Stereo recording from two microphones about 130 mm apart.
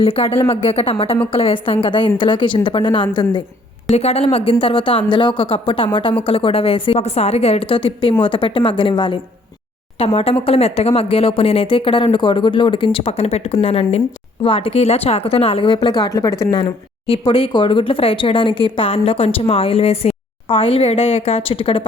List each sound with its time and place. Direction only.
0.0 s a woman's voice: 50° left (ahead or behind)
3.9 s a woman's voice: 50° left (ahead or behind); by 16.6 s 25° left (ahead or behind)
16.6 s speech: 40° left (ahead or behind)